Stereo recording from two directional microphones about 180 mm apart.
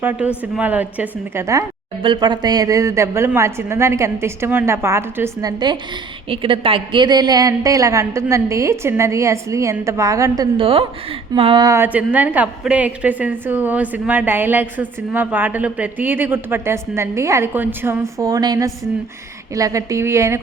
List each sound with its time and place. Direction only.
0.0 s a woman's voice: 10° right (ahead or behind)
2.0 s a woman's voice: 25° right (ahead or behind)